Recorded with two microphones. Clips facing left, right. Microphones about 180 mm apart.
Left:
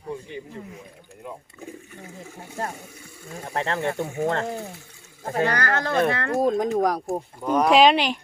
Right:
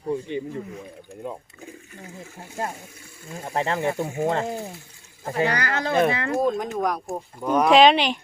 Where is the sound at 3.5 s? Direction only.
15° right (ahead or behind).